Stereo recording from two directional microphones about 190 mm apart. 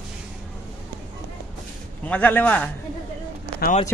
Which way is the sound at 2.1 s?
10° left (ahead or behind).